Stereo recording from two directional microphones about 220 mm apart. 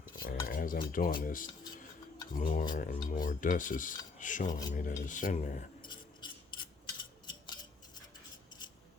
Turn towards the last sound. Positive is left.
turn(degrees=20)  # may be behind; listen again after turning